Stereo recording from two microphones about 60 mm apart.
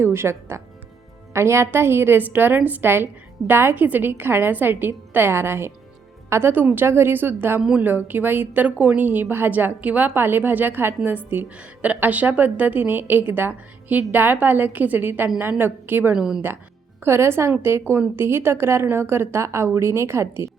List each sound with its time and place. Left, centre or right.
0.0 s a woman's voice: right
16.1 s a woman's voice: centre
17.0 s a woman's voice: right